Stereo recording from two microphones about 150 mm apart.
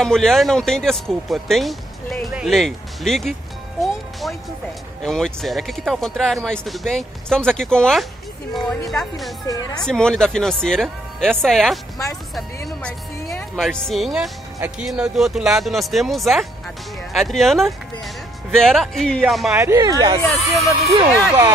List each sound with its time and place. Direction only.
0.0 s speech: 5° left (ahead or behind)
3.8 s music: centre (ahead or behind)
5.0 s speech: 5° left (ahead or behind)
9.5 s speech: 25° left (ahead or behind)
9.8 s speech: 5° left (ahead or behind)
13.6 s speech: centre (ahead or behind)
19.5 s speech: 20° right (ahead or behind)
21.1 s speech: centre (ahead or behind)